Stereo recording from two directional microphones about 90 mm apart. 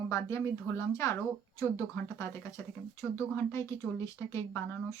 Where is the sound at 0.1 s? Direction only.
30° left (ahead or behind).